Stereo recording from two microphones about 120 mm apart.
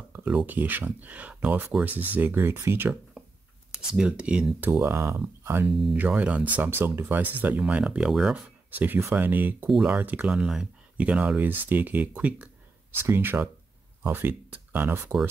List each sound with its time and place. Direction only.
0.1 s speech: 15° right (ahead or behind)
4.6 s speech: 20° right (ahead or behind)
5.7 s speech: centre (ahead or behind); by 15.1 s 20° right (ahead or behind)